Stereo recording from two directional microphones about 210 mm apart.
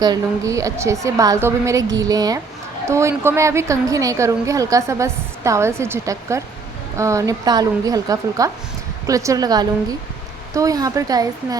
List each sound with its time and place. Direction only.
0.0 s a woman's voice: 15° right (ahead or behind)